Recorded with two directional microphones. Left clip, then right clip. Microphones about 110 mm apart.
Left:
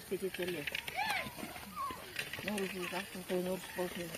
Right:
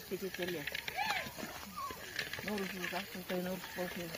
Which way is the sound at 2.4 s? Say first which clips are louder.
Left 1 dB; 15° left (ahead or behind).